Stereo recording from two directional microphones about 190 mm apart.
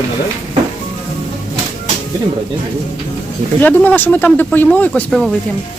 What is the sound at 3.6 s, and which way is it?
Speech, 10° left (ahead or behind).